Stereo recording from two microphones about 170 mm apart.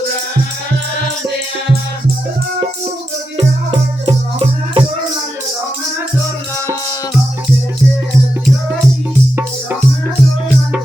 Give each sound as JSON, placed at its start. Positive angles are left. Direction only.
{"t": 3.3, "sound": "music", "side_deg": -30}